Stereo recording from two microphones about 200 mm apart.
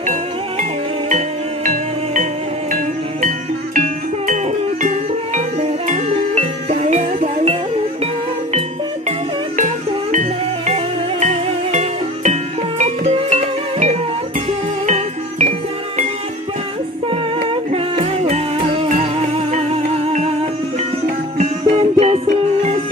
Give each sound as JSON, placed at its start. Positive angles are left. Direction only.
{"t": 0.0, "sound": "music", "side_deg": -40}
{"t": 10.1, "sound": "music", "side_deg": -35}
{"t": 17.1, "sound": "music", "side_deg": -30}
{"t": 21.6, "sound": "music", "side_deg": -25}